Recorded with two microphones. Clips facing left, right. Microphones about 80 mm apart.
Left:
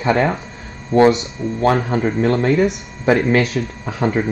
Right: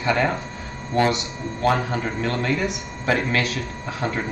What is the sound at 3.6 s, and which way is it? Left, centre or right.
Speech, left.